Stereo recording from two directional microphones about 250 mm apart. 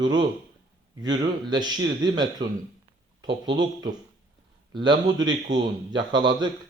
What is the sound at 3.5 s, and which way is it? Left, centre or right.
Speech, centre.